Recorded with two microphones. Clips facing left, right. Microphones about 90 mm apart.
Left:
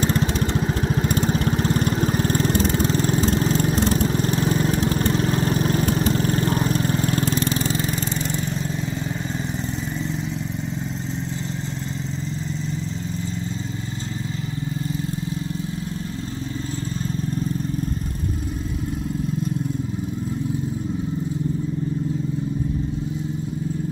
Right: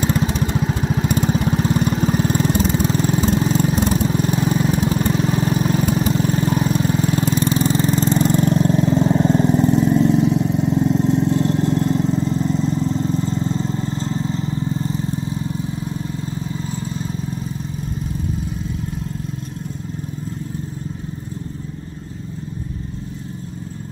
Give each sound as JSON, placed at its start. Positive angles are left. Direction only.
{"t": 0.0, "sound": "lawn mower", "side_deg": -5}
{"t": 1.1, "sound": "vehicle", "side_deg": -5}
{"t": 8.2, "sound": "vehicle", "side_deg": -45}